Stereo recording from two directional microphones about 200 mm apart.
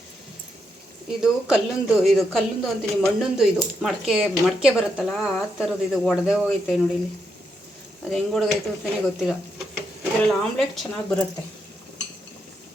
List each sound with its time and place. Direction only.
1.2 s speech: centre (ahead or behind)
8.1 s speech: centre (ahead or behind)